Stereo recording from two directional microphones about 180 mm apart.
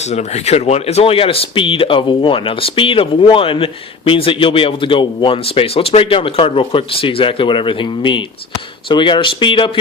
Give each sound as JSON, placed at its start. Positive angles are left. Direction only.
{"t": 0.1, "sound": "speech", "side_deg": 40}